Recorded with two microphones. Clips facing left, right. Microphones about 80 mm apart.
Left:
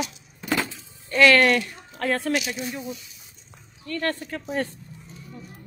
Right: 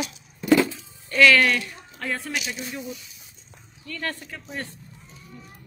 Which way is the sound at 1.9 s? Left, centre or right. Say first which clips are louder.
Left 6 dB; left.